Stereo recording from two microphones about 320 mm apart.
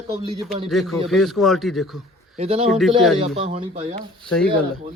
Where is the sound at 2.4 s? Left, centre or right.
Centre.